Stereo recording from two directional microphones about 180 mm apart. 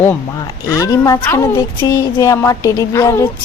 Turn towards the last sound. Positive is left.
turn(degrees=15)  # may be behind; listen again after turning